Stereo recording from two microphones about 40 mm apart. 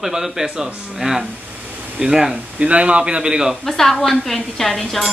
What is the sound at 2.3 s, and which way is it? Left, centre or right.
Speech, right.